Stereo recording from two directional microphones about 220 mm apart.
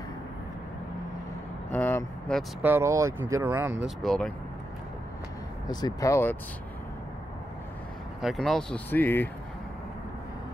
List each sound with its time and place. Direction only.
1.7 s vehicle: 10° left (ahead or behind)
2.6 s speech: 10° right (ahead or behind)
5.7 s speech: 20° left (ahead or behind)
8.2 s speech: centre (ahead or behind)